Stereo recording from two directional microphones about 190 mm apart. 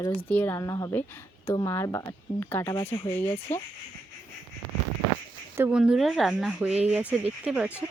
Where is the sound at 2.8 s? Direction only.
25° left (ahead or behind).